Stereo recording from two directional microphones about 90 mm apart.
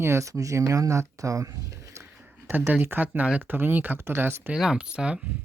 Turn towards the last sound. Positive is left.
turn(degrees=-10)  # may be behind; listen again after turning